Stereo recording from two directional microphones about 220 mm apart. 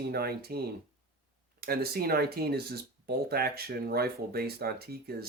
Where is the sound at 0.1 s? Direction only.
45° right (ahead or behind).